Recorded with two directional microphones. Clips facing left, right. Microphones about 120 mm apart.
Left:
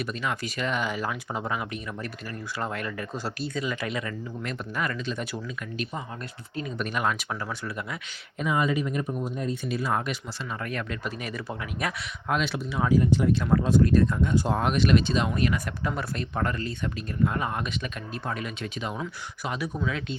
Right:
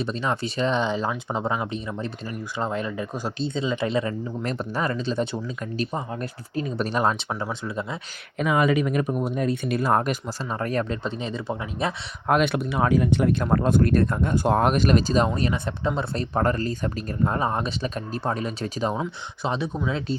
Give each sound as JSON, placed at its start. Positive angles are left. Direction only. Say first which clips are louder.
{"t": 0.0, "sound": "speech", "louder": "right 4 dB", "side_deg": -30}
{"t": 8.4, "sound": "speech", "louder": "right 5 dB", "side_deg": -75}
{"t": 12.3, "sound": "speech", "louder": "right 6 dB", "side_deg": -55}
{"t": 15.3, "sound": "speech", "louder": "right 1 dB", "side_deg": -30}
{"t": 16.1, "sound": "speech", "louder": "right 6 dB", "side_deg": -35}
{"t": 18.9, "sound": "speech", "louder": "right 5 dB", "side_deg": -25}